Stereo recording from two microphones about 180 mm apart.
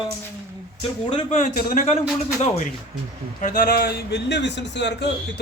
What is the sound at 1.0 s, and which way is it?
Speech, 35° left (ahead or behind).